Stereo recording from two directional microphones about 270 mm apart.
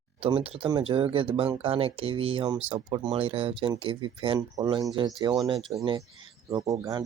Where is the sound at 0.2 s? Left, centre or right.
Centre.